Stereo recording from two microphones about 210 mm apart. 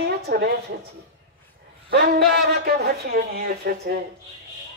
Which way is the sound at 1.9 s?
50° right (ahead or behind).